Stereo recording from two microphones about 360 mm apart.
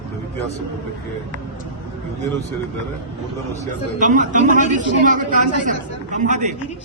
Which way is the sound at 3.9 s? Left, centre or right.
Right.